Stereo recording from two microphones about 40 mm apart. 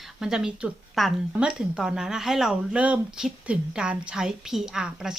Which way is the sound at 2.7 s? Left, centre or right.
Right.